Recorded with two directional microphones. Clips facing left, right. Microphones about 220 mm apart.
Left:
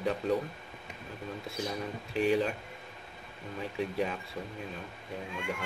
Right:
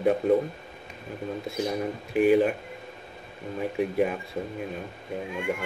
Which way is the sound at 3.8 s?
55° right (ahead or behind).